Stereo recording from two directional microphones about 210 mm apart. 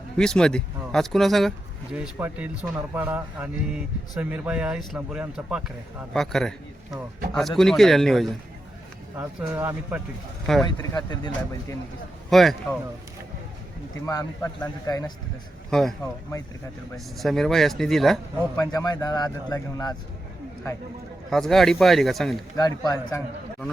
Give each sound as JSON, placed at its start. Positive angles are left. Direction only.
{"t": 0.2, "sound": "speech", "side_deg": 5}
{"t": 9.1, "sound": "a man's voice", "side_deg": -10}
{"t": 10.4, "sound": "speech", "side_deg": 0}
{"t": 10.9, "sound": "speech", "side_deg": 20}
{"t": 12.3, "sound": "speech", "side_deg": 0}
{"t": 14.1, "sound": "speech", "side_deg": 15}
{"t": 17.2, "sound": "speech", "side_deg": 0}
{"t": 18.6, "sound": "speech", "side_deg": 15}
{"t": 21.2, "sound": "speech", "side_deg": 0}
{"t": 22.5, "sound": "speech", "side_deg": 20}